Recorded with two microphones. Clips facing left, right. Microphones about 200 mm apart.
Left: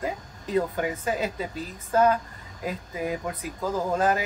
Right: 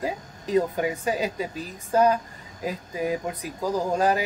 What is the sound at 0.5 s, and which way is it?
Speech, 15° right (ahead or behind).